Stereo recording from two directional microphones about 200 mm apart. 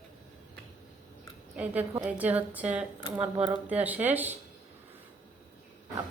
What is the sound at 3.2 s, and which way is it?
Speech, 30° right (ahead or behind).